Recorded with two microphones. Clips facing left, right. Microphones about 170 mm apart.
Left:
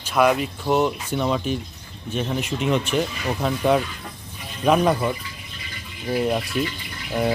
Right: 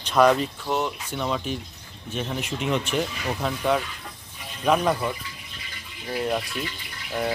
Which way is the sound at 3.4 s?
20° left (ahead or behind).